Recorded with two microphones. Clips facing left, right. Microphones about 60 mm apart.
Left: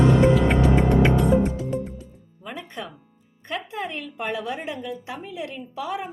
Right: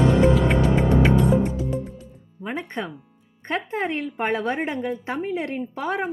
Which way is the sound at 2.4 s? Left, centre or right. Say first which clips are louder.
Right 5 dB; right.